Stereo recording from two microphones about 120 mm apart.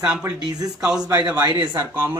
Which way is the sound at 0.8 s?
5° right (ahead or behind).